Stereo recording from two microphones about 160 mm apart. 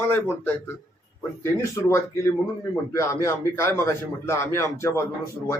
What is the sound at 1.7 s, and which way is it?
A man's voice, 15° left (ahead or behind).